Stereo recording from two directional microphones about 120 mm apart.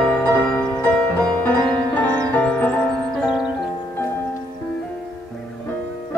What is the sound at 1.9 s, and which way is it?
Music, 15° left (ahead or behind).